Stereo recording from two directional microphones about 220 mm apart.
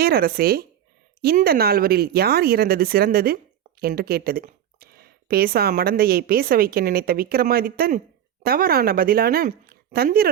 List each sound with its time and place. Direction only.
0.0 s speech: 45° right (ahead or behind)